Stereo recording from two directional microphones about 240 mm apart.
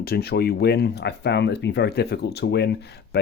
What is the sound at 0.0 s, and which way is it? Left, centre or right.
Speech, left.